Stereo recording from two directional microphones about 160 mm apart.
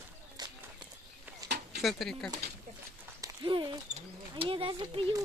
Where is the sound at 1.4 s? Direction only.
90° right.